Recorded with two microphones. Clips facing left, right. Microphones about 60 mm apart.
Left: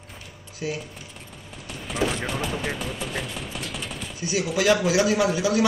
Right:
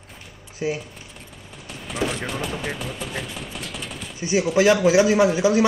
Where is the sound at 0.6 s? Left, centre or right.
Right.